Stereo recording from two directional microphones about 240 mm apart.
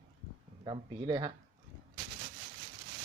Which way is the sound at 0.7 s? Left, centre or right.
Centre.